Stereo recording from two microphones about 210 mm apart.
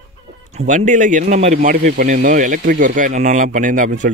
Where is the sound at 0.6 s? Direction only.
35° right (ahead or behind).